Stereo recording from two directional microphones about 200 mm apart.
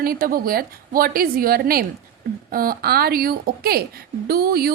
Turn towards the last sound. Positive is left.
turn(degrees=-50)  # may be behind; listen again after turning